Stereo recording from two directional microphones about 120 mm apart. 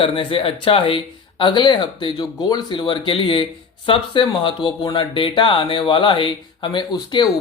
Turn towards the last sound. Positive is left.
turn(degrees=40)  # may be behind; listen again after turning